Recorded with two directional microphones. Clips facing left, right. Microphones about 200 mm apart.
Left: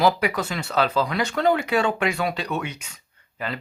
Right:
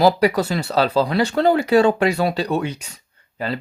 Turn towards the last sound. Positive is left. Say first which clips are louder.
# right 5 dB
turn(degrees=-35)  # may be behind; listen again after turning